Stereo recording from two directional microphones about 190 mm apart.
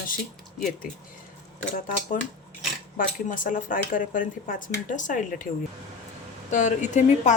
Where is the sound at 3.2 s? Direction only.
45° left (ahead or behind).